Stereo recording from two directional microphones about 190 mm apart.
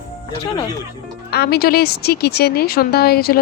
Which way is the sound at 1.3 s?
55° left (ahead or behind).